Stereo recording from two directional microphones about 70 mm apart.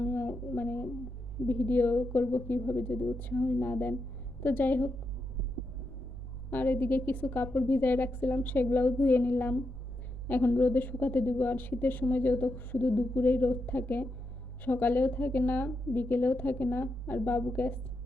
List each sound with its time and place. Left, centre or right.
0.0 s a sound: left
1.5 s a woman's voice: left
6.5 s a woman's voice: left